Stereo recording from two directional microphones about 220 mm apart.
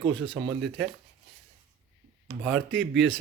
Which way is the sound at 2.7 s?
55° right (ahead or behind).